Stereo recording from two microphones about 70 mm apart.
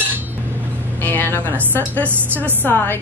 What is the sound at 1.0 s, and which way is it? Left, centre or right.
A woman's voice, left.